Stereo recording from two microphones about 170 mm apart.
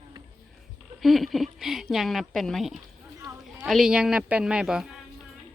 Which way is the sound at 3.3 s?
10° right (ahead or behind).